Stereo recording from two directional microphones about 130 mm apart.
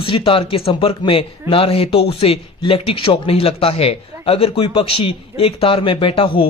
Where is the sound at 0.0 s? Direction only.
45° left (ahead or behind).